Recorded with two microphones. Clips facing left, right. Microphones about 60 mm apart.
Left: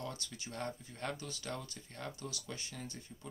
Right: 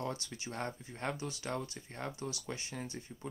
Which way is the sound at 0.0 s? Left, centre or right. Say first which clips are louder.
Right 5 dB; right.